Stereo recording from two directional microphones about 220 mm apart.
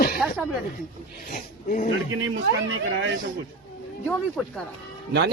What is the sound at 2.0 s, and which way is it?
Speech, 55° right (ahead or behind).